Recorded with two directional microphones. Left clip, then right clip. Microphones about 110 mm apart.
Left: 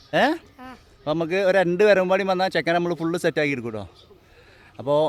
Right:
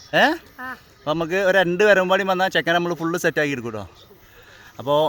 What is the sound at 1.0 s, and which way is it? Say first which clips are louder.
Speech: right 1 dB; 25° left (ahead or behind).